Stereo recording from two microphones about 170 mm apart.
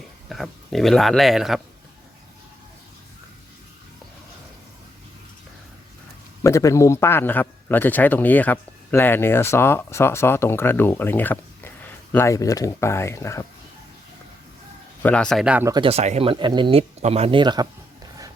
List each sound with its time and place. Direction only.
0.3 s speech: centre (ahead or behind)
6.4 s a man's voice: 20° left (ahead or behind)
15.0 s speech: 5° left (ahead or behind)
15.6 s speech: 25° right (ahead or behind)
15.9 s speech: 40° right (ahead or behind)
17.0 s speech: 40° right (ahead or behind)